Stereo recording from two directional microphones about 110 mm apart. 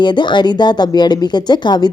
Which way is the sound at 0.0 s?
45° left (ahead or behind).